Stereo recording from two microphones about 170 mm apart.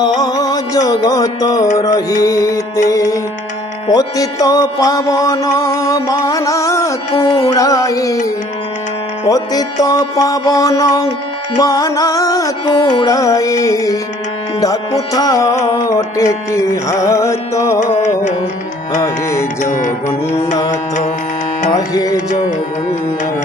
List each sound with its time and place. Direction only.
0.0 s music: 25° left (ahead or behind)
9.3 s music: 20° left (ahead or behind)
15.1 s music: 20° left (ahead or behind)
19.0 s music: 15° left (ahead or behind)
19.7 s music: 45° left (ahead or behind)
21.7 s music: 20° left (ahead or behind)